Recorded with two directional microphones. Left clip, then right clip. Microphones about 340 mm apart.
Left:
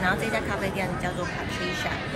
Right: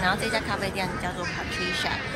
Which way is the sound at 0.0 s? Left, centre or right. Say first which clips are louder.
Even; centre.